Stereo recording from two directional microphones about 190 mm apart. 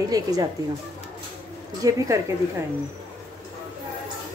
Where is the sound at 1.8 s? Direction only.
20° right (ahead or behind).